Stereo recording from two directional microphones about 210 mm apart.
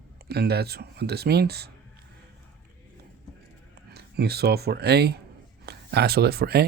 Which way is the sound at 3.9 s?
50° right (ahead or behind).